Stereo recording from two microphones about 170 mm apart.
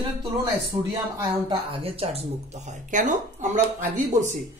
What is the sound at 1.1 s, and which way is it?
Speech, 20° right (ahead or behind).